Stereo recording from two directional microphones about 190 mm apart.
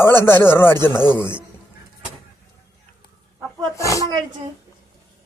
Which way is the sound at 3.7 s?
15° left (ahead or behind).